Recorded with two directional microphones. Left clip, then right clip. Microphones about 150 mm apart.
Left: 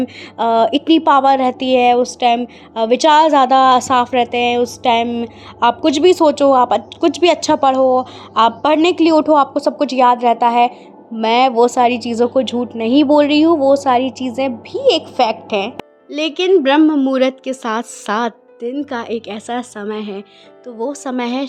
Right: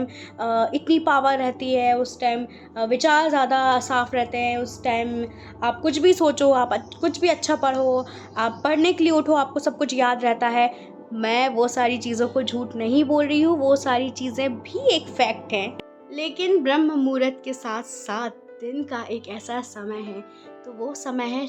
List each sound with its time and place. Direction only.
0.0 s speech: 60° left (ahead or behind); by 7.1 s 40° left (ahead or behind)
7.1 s speech: 55° left (ahead or behind)
16.1 s speech: 70° left (ahead or behind)
16.5 s a woman's voice: 50° left (ahead or behind)
20.7 s a woman's voice: 55° left (ahead or behind)